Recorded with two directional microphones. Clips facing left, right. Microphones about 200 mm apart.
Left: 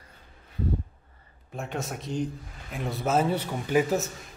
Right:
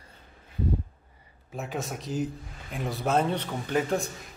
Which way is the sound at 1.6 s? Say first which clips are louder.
Even; centre (ahead or behind).